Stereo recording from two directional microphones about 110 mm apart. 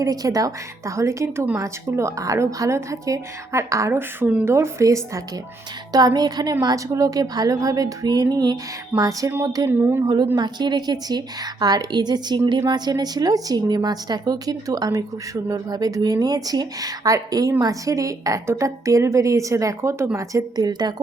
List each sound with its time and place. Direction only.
0.0 s a woman's voice: 30° right (ahead or behind); by 4.5 s 15° right (ahead or behind)
4.5 s a woman's voice: 25° right (ahead or behind)
9.6 s a woman's voice: 20° right (ahead or behind)
10.3 s a woman's voice: 40° right (ahead or behind)